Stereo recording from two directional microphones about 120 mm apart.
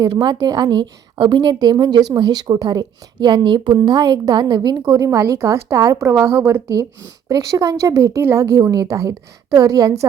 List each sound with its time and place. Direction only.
0.0 s a woman's voice: 35° right (ahead or behind)